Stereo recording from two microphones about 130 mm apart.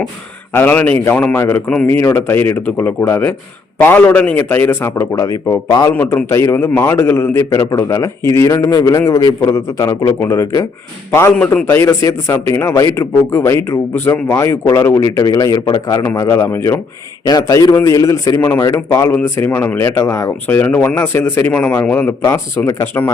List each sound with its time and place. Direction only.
0.5 s speech: 15° left (ahead or behind)
5.9 s a man's voice: 15° left (ahead or behind)
17.2 s a man's voice: 30° left (ahead or behind)